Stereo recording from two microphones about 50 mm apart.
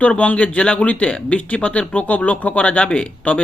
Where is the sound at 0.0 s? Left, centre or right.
Left.